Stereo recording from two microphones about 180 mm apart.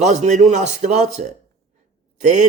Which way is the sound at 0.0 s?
40° right (ahead or behind).